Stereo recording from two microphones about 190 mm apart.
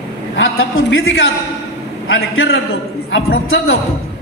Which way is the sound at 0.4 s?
90° left.